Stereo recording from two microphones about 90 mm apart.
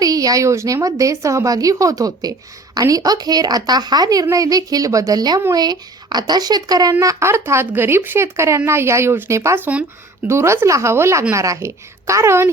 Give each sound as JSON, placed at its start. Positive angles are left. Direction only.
{"t": 0.0, "sound": "a woman's voice", "side_deg": -40}
{"t": 7.0, "sound": "speech", "side_deg": -35}